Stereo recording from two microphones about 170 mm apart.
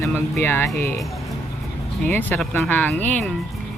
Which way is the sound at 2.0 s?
10° left (ahead or behind).